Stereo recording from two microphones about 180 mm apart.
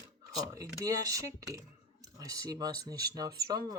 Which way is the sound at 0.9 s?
20° right (ahead or behind).